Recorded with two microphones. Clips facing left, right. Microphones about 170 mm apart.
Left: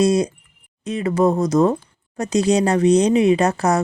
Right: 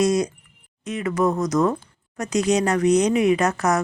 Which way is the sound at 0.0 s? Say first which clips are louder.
Left 3 dB; 30° left (ahead or behind).